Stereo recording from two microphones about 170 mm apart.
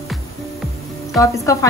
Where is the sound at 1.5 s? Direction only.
20° left (ahead or behind).